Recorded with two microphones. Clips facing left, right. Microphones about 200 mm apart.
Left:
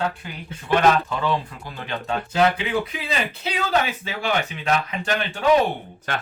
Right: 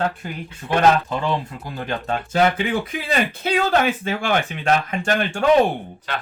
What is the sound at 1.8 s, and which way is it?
Speech, 45° right (ahead or behind).